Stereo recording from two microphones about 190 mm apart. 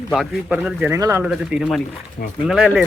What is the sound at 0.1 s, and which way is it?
A man's voice, centre (ahead or behind).